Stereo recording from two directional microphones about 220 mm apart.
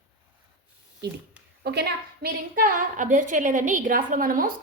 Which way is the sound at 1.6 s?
45° right (ahead or behind).